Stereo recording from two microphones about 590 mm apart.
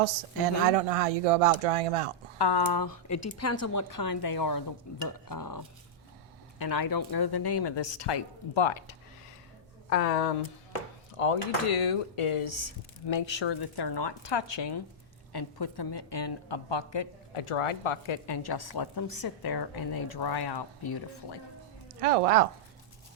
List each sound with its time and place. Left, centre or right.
0.0 s speech: right
2.4 s a woman's voice: left
9.9 s speech: left
11.2 s a woman's voice: left
22.0 s speech: right